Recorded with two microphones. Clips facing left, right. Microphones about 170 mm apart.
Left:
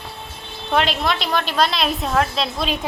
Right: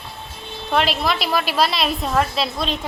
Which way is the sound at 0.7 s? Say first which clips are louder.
Even; centre (ahead or behind).